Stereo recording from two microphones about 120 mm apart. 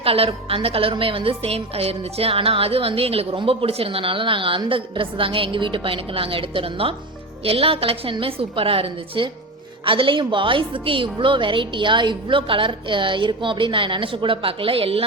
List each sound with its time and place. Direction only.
0.0 s a woman's voice: 50° right (ahead or behind)